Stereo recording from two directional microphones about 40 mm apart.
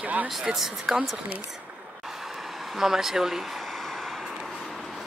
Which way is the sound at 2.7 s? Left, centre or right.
Centre.